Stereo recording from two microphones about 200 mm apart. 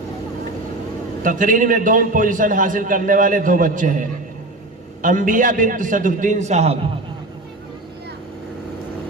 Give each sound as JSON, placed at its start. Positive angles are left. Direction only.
{"t": 1.2, "sound": "a man's voice", "side_deg": -40}
{"t": 5.0, "sound": "a man's voice", "side_deg": -40}